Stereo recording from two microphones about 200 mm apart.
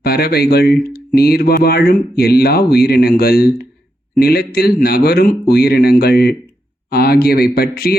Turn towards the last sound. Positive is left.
turn(degrees=50)  # may be behind; listen again after turning